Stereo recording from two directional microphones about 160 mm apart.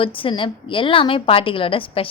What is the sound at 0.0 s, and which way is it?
A woman's voice, 35° left (ahead or behind).